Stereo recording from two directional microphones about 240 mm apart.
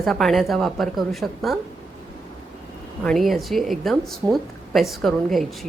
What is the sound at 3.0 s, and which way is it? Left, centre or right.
A woman's voice, centre.